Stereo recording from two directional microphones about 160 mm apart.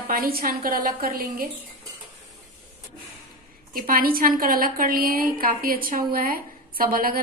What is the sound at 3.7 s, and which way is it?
A woman's voice, 65° right (ahead or behind).